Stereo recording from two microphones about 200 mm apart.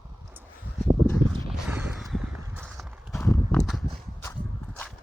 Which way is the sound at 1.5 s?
5° right (ahead or behind).